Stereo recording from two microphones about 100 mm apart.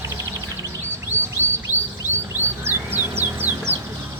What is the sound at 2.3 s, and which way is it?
Music, 20° right (ahead or behind).